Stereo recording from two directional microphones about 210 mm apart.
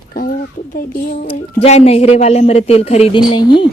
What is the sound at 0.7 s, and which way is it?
Speech, 40° left (ahead or behind).